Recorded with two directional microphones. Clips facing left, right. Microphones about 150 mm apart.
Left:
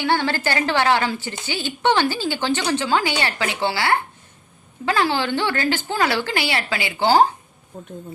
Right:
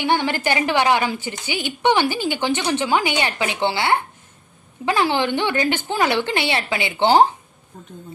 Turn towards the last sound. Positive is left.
turn(degrees=-20)  # may be behind; listen again after turning